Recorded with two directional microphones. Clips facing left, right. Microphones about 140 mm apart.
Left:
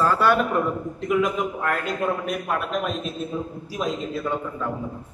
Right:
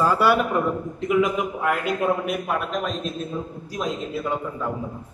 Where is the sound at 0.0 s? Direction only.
10° right (ahead or behind).